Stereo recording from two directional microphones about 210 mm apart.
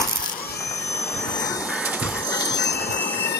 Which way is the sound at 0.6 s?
15° left (ahead or behind).